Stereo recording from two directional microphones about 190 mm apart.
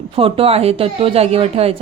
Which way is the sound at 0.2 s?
30° right (ahead or behind).